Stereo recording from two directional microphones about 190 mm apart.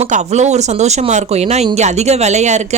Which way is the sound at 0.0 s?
35° right (ahead or behind).